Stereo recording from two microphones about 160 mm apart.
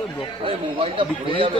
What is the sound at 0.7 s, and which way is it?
Speech, 35° right (ahead or behind).